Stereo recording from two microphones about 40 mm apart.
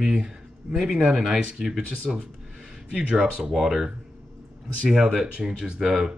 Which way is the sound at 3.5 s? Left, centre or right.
Centre.